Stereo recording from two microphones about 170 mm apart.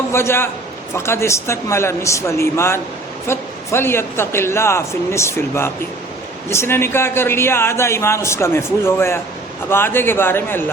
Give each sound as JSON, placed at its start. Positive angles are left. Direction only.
{"t": 0.1, "sound": "a man's voice", "side_deg": 15}